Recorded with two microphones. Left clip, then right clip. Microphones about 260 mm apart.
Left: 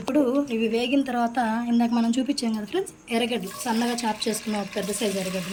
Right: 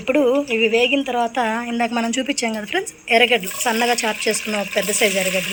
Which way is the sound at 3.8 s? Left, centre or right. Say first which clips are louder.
Right 8 dB; centre.